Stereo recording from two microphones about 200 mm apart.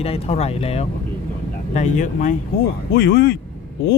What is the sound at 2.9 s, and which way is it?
Speech, 55° left (ahead or behind).